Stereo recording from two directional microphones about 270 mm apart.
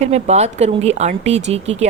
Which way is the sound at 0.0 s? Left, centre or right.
Right.